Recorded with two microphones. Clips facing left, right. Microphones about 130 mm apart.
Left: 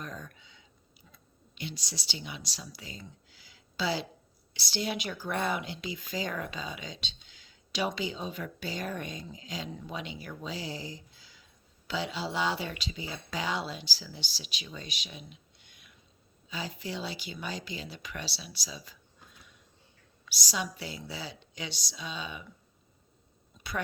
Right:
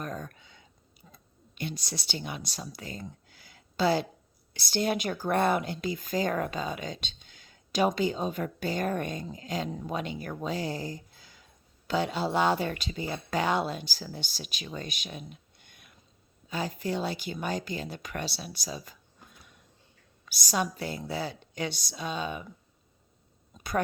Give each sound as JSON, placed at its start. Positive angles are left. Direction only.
{"t": 0.0, "sound": "a sound", "side_deg": -50}
{"t": 1.1, "sound": "speech", "side_deg": -50}
{"t": 20.2, "sound": "speech", "side_deg": -50}